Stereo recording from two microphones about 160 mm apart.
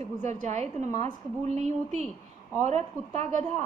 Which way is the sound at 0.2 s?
50° right (ahead or behind).